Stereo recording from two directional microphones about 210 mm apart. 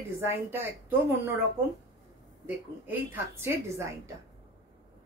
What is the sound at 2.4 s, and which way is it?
A woman's voice, 10° right (ahead or behind).